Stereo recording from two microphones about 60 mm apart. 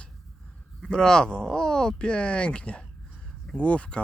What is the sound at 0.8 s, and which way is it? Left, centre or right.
Speech, centre.